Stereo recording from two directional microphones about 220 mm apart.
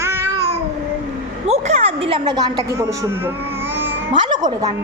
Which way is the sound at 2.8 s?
10° right (ahead or behind).